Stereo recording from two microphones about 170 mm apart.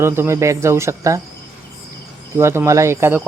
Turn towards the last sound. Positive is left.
turn(degrees=-15)  # may be behind; listen again after turning